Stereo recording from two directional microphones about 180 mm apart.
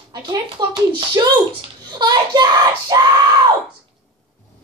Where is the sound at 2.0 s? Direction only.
25° right (ahead or behind).